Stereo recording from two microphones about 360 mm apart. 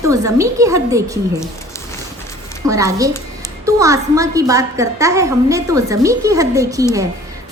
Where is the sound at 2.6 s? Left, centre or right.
Centre.